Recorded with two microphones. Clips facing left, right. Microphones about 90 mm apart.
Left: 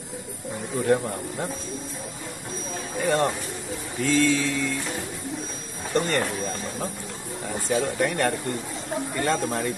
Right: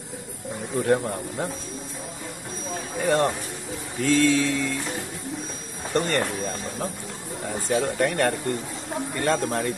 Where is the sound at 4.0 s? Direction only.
55° right (ahead or behind).